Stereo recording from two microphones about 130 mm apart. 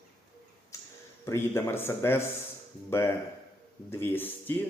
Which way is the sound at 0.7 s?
25° left (ahead or behind).